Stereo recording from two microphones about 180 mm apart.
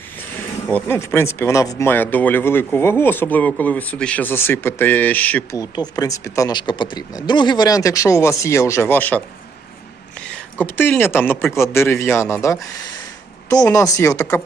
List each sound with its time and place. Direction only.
0.2 s speech: 10° left (ahead or behind)